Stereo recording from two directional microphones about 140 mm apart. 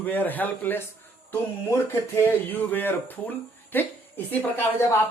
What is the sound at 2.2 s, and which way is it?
Speech, 15° left (ahead or behind).